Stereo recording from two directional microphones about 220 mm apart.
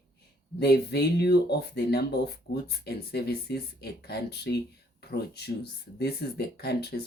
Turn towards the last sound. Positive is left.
turn(degrees=50)  # may be behind; listen again after turning